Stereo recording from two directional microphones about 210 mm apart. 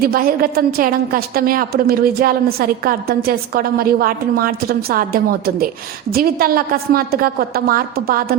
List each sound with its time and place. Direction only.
0.0 s a woman's voice: 45° right (ahead or behind)